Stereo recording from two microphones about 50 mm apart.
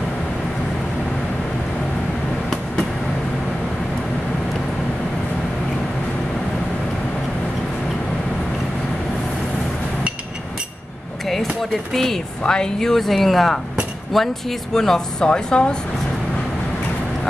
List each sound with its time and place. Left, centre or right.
11.9 s speech: centre